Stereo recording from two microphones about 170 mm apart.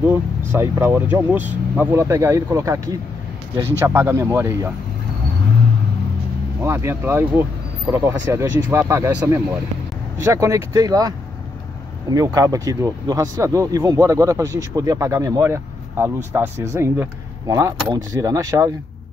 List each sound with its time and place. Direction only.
0.1 s speech: 15° right (ahead or behind)
6.6 s speech: 15° right (ahead or behind)